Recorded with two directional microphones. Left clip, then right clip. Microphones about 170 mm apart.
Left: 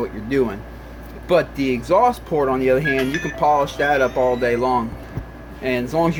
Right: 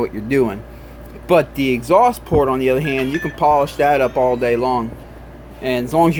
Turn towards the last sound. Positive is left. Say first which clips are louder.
# right 4 dB
turn(degrees=-35)  # may be behind; listen again after turning